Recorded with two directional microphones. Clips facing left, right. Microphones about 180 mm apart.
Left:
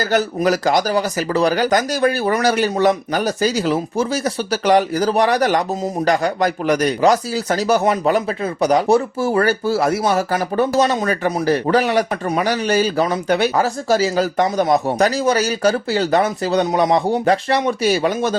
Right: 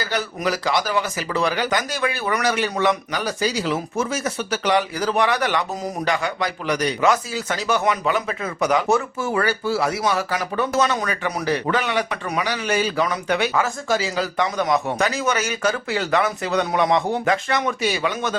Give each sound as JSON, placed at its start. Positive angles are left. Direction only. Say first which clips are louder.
{"t": 0.1, "sound": "speech", "louder": "left 8 dB", "side_deg": 45}